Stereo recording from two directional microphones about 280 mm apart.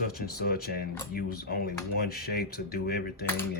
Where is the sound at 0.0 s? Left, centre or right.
Left.